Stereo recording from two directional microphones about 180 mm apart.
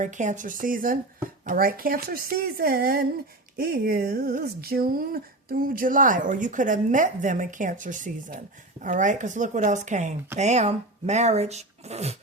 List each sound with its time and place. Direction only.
0.0 s speech: 45° right (ahead or behind)